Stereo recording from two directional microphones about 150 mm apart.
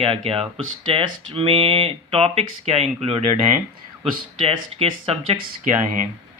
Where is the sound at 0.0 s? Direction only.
40° right (ahead or behind).